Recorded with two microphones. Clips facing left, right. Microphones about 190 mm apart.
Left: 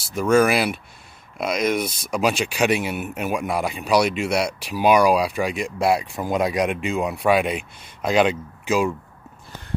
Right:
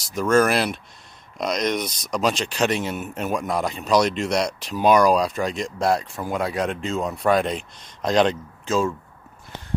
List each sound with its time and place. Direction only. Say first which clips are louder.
0.1 s speech: left 1 dB; 10° left (ahead or behind)